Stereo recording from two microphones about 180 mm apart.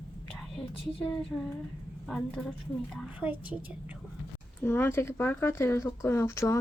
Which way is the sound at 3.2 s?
10° right (ahead or behind).